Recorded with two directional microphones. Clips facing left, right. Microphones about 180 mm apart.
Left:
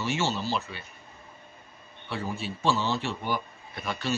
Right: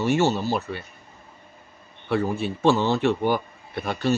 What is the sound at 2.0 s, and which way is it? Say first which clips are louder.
A man's voice: right 9 dB; 55° right (ahead or behind).